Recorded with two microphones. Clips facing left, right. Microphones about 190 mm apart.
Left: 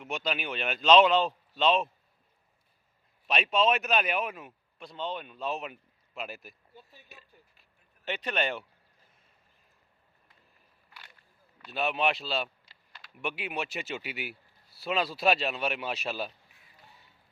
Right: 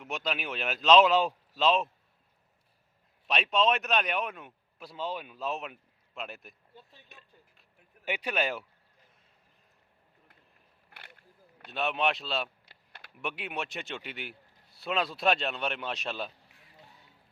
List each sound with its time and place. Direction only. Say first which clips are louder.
0.0 s a man's voice: left 1 dB; centre (ahead or behind)
3.2 s a man's voice: left 1 dB; centre (ahead or behind)
8.0 s speech: even; 10° right (ahead or behind)
10.8 s a sound: right 2 dB; 55° right (ahead or behind)
11.7 s a man's voice: left 1 dB; centre (ahead or behind)
12.6 s a sound: right 2 dB; 60° right (ahead or behind)
13.1 s a man's voice: left 2 dB; centre (ahead or behind)